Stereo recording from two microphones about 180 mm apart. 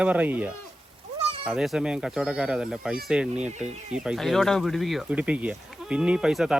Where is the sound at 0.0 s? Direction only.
10° right (ahead or behind).